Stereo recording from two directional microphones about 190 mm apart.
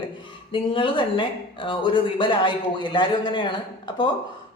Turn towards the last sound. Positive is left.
turn(degrees=25)  # may be behind; listen again after turning